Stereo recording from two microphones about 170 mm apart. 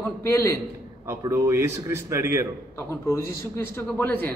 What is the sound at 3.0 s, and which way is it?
A man's voice, 15° left (ahead or behind).